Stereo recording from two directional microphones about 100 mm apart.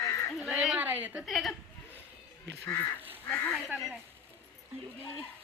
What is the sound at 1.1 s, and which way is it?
Speech, centre (ahead or behind).